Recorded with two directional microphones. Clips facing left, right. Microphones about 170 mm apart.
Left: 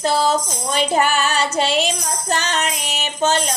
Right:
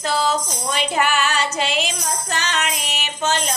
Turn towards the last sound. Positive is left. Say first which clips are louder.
# left 4 dB
turn(degrees=30)  # may be behind; listen again after turning